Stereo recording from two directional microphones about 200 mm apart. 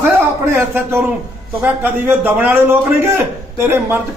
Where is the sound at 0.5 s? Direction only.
10° right (ahead or behind).